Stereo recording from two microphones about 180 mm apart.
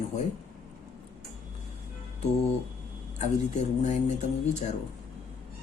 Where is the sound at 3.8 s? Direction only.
40° left (ahead or behind).